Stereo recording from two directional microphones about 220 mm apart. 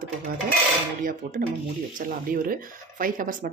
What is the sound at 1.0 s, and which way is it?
Speech, 40° right (ahead or behind).